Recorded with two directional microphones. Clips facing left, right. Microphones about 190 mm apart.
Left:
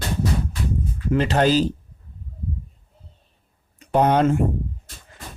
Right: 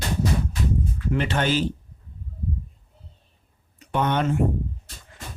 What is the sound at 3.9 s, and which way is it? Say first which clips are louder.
Speech: left 6 dB; 35° left (ahead or behind).